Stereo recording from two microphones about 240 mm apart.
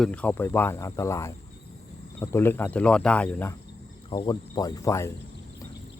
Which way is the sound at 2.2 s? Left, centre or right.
Centre.